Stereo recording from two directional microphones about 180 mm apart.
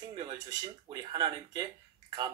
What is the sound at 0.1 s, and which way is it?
Speech, 25° right (ahead or behind).